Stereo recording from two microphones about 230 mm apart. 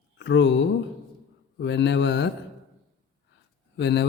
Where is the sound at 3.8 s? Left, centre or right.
Left.